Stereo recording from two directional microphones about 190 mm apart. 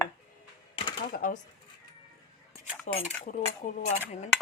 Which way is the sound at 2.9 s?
40° left (ahead or behind).